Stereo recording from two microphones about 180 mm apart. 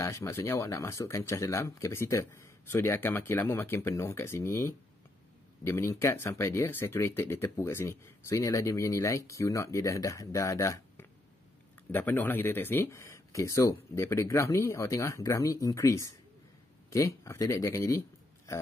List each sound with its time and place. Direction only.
0.0 s speech: 15° left (ahead or behind)